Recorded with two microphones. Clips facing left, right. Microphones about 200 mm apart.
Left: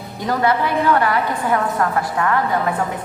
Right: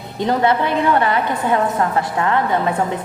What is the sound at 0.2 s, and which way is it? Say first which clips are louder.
A woman's voice: right 2 dB; 25° right (ahead or behind).